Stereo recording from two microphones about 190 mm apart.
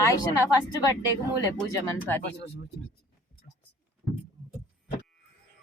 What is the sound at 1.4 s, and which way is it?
Speech, 15° left (ahead or behind).